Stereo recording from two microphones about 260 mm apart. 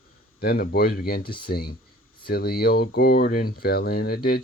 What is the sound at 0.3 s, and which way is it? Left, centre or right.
Speech, left.